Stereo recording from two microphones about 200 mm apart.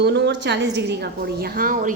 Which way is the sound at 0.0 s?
60° right (ahead or behind).